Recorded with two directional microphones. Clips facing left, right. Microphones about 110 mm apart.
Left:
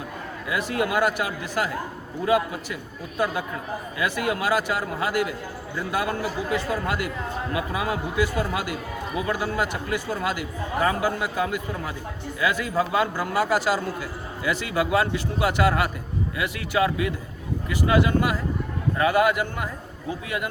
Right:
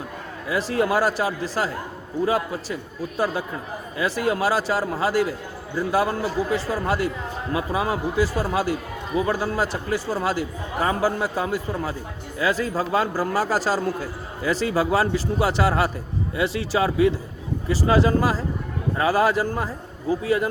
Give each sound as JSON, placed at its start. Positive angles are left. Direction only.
{"t": 0.4, "sound": "a man's voice", "side_deg": -30}
{"t": 3.9, "sound": "a man's voice", "side_deg": -30}